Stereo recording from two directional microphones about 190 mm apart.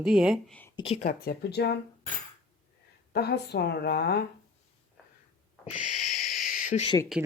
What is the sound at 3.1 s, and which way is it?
A woman's voice, 60° left (ahead or behind).